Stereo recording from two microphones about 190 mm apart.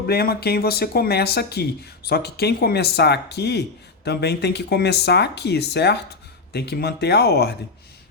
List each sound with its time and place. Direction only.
0.0 s speech: 55° left (ahead or behind)